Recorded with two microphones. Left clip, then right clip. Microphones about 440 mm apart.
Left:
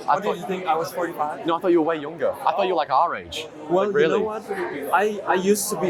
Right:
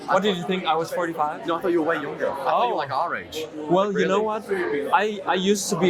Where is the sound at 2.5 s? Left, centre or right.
Left.